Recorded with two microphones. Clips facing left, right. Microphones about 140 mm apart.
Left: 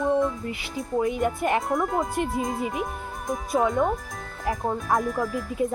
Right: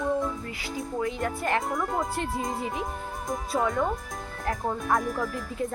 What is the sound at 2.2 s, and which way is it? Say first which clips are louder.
Speech: left 4 dB; 15° left (ahead or behind).